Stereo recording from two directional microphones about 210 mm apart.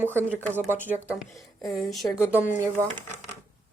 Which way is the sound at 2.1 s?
10° left (ahead or behind).